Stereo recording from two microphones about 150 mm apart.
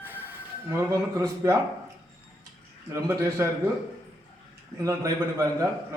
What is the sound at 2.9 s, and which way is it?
Speech, 20° right (ahead or behind).